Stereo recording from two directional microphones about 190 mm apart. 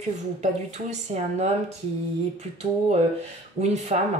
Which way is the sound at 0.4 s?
35° right (ahead or behind).